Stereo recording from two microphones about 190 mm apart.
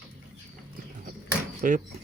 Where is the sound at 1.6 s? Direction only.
45° right (ahead or behind).